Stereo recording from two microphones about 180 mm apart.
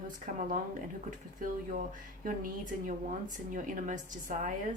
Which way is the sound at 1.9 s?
50° right (ahead or behind).